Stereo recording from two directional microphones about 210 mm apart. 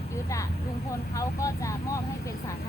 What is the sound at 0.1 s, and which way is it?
Vehicle, 15° left (ahead or behind).